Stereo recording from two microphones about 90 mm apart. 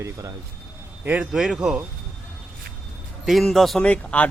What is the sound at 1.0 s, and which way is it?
Speech, 20° right (ahead or behind).